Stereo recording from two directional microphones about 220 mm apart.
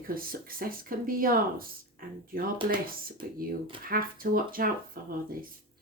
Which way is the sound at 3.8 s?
40° right (ahead or behind).